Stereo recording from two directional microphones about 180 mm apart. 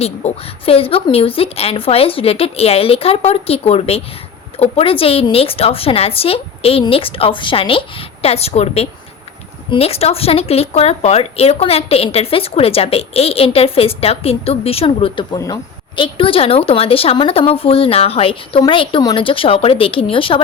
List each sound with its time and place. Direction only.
0.0 s speech: 35° left (ahead or behind)